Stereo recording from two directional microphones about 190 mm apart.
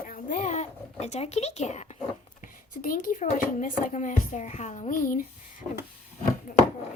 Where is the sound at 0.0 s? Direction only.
45° left (ahead or behind).